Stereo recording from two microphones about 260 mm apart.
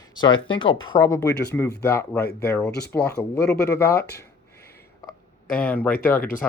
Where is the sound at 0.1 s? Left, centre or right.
Centre.